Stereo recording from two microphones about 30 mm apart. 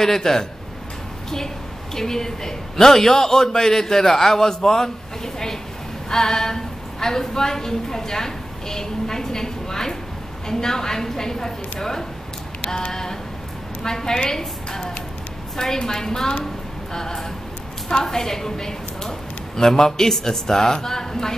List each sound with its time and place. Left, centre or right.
0.0 s a woman's voice: centre
2.0 s a woman's voice: centre
13.8 s a woman's voice: centre